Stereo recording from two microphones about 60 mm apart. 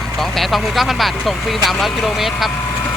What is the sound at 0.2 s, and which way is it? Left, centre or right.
Speech, centre.